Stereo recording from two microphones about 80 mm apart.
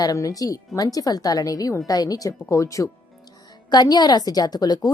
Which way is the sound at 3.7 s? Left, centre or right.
Left.